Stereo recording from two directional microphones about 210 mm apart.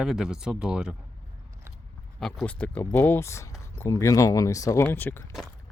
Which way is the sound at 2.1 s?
Centre (ahead or behind).